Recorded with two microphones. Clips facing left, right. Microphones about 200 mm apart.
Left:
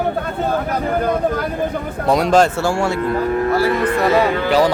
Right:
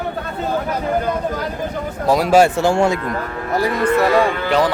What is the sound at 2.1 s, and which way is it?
Speech, 5° right (ahead or behind).